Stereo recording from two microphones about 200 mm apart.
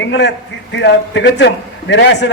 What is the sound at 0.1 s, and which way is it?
A man's voice, 65° left (ahead or behind).